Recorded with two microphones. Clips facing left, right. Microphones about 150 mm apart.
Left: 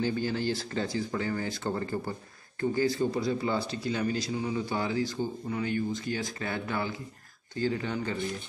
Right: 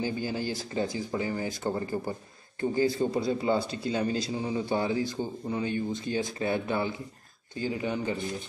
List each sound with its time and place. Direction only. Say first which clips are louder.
0.0 s speech: left 2 dB; 15° right (ahead or behind)